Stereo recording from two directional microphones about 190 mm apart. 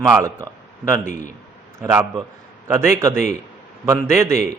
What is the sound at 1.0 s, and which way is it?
Speech, 40° left (ahead or behind).